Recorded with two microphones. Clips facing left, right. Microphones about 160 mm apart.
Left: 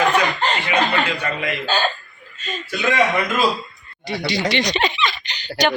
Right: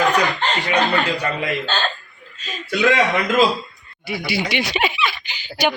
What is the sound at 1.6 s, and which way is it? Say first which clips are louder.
Speech: left 3 dB; 10° left (ahead or behind).